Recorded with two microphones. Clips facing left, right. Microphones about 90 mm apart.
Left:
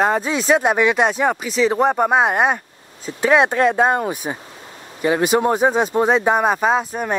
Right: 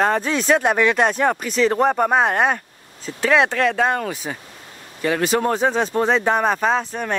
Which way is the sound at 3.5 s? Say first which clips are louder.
Left 3 dB; 25° left (ahead or behind).